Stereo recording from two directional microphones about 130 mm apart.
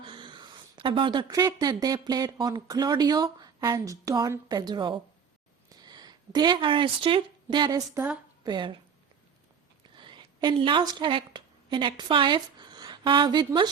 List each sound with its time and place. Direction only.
0.0 s a sound: 40° right (ahead or behind)
1.5 s speech: 30° right (ahead or behind)
5.6 s a sound: 30° right (ahead or behind)
7.9 s speech: 10° right (ahead or behind)
8.4 s speech: 40° right (ahead or behind)
9.9 s a woman's voice: 40° right (ahead or behind)